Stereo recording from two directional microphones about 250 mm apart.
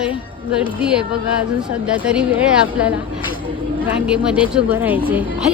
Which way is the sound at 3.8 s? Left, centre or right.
Centre.